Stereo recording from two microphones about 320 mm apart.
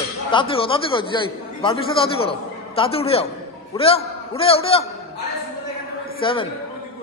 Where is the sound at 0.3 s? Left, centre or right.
Centre.